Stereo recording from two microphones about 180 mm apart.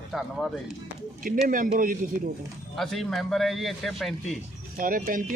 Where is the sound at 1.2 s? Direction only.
50° right (ahead or behind).